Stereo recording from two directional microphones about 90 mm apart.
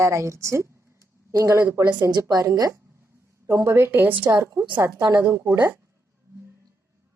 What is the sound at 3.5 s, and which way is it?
A woman's voice, 25° right (ahead or behind).